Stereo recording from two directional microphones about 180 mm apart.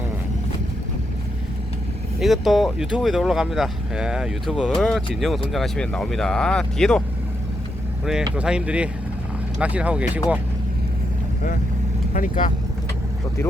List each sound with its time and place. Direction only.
2.1 s speech: centre (ahead or behind)
8.0 s speech: 5° right (ahead or behind)
12.1 s speech: 45° left (ahead or behind)